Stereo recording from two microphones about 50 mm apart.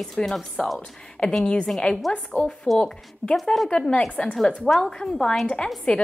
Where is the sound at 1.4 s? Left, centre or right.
Centre.